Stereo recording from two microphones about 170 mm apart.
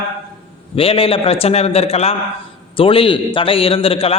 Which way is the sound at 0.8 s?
35° left (ahead or behind).